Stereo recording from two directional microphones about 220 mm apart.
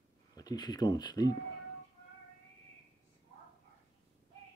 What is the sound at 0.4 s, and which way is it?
Speech, 20° left (ahead or behind).